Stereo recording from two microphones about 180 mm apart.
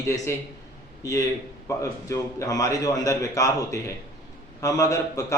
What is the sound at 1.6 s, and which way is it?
A man's voice, 15° left (ahead or behind).